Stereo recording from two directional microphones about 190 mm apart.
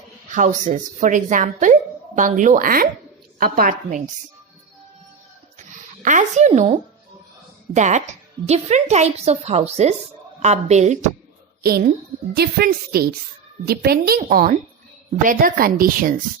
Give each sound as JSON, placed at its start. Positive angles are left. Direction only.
{"t": 0.3, "sound": "speech", "side_deg": -40}
{"t": 5.5, "sound": "zipper", "side_deg": -40}
{"t": 7.7, "sound": "a woman's voice", "side_deg": -40}
{"t": 11.6, "sound": "a woman's voice", "side_deg": -50}